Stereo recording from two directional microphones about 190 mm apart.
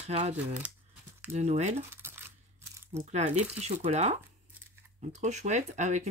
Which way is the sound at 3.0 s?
35° right (ahead or behind).